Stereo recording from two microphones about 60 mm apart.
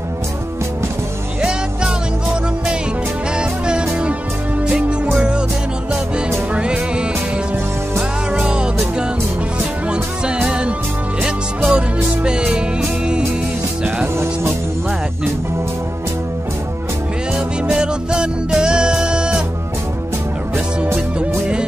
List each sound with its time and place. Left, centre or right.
1.4 s music: centre
3.3 s music: centre
5.1 s music: centre
6.5 s music: centre
8.3 s music: centre
9.8 s music: centre
17.6 s music: centre
20.5 s music: right